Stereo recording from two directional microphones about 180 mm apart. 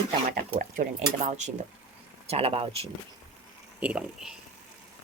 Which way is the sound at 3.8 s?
5° right (ahead or behind).